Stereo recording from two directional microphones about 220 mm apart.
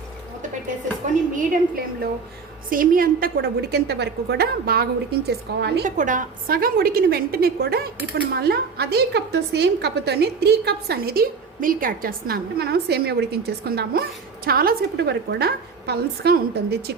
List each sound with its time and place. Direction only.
1.1 s a woman's voice: 35° right (ahead or behind)
6.0 s a woman's voice: 35° right (ahead or behind)